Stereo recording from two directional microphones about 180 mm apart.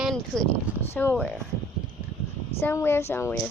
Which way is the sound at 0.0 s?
Centre (ahead or behind).